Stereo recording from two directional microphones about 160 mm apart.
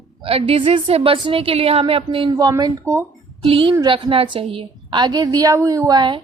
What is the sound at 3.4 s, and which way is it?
A woman's voice, 35° right (ahead or behind).